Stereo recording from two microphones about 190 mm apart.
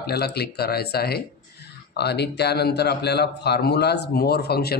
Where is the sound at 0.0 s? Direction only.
60° left (ahead or behind).